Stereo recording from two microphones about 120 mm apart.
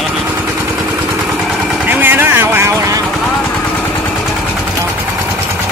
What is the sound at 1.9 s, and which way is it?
Vehicle, 15° right (ahead or behind).